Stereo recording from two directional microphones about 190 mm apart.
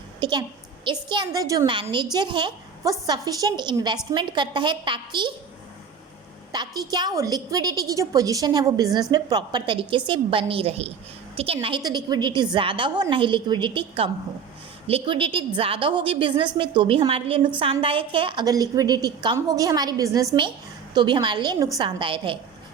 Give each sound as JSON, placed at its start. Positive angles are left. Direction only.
{"t": 0.2, "sound": "a woman's voice", "side_deg": -20}
{"t": 6.5, "sound": "a woman's voice", "side_deg": -20}